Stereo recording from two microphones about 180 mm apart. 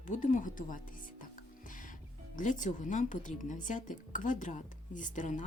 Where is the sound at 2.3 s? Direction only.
45° left (ahead or behind).